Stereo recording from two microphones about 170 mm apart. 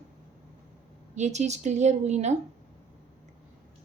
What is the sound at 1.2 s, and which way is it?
A woman's voice, 45° right (ahead or behind).